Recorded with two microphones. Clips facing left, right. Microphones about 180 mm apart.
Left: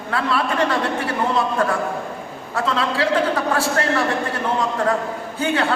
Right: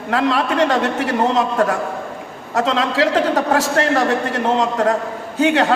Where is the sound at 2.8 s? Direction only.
40° right (ahead or behind).